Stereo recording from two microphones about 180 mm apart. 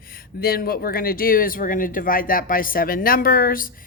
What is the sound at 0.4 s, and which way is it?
Speech, 55° left (ahead or behind).